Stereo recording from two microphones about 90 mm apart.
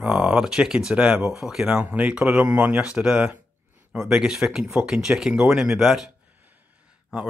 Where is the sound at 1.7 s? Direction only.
20° right (ahead or behind).